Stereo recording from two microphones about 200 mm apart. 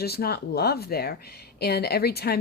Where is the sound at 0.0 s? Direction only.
50° left (ahead or behind).